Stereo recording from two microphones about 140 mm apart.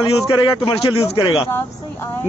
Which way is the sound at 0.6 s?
45° left (ahead or behind).